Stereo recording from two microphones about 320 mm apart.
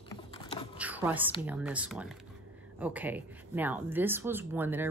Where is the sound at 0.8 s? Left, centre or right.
Centre.